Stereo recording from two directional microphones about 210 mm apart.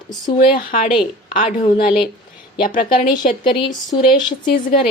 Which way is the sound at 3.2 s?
40° left (ahead or behind).